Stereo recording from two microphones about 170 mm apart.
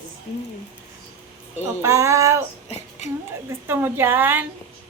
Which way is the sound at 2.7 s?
40° left (ahead or behind).